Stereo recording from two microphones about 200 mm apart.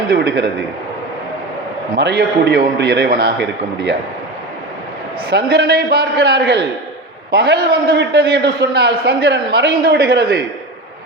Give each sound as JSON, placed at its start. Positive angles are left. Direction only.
{"t": 0.1, "sound": "a man's voice", "side_deg": -55}
{"t": 2.0, "sound": "a man's voice", "side_deg": -55}
{"t": 5.5, "sound": "a man's voice", "side_deg": -50}